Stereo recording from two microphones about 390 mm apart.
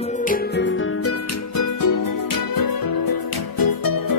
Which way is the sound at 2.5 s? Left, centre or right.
Left.